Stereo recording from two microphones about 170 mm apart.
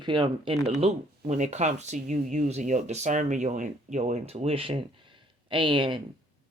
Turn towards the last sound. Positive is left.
turn(degrees=-30)  # may be behind; listen again after turning